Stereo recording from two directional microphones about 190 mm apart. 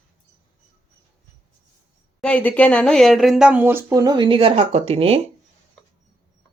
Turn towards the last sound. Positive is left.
turn(degrees=-30)  # may be behind; listen again after turning